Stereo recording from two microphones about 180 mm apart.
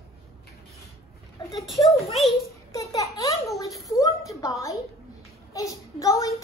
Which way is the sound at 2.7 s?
20° left (ahead or behind).